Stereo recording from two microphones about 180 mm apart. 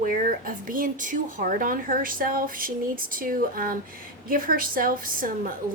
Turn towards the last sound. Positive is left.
turn(degrees=-50)  # may be behind; listen again after turning